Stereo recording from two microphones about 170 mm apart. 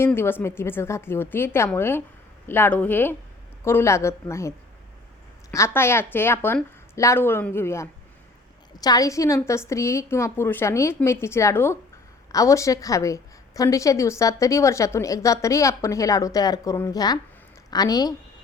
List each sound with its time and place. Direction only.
0.0 s a woman's voice: 15° left (ahead or behind)